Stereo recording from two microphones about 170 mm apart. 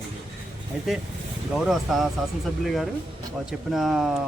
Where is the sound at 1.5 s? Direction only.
Centre (ahead or behind).